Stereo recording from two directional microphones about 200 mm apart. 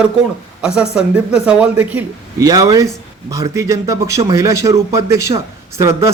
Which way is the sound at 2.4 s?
20° right (ahead or behind).